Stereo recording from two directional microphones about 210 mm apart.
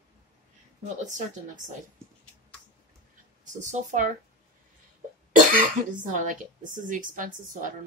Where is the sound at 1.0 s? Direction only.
35° right (ahead or behind).